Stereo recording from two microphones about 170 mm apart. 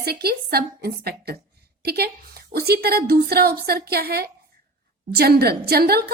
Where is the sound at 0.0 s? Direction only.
65° right (ahead or behind).